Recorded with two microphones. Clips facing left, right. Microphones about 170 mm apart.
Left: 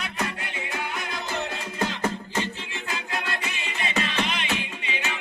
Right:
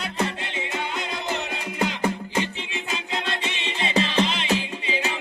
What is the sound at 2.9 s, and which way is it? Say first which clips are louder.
Music: right 2 dB; 25° right (ahead or behind).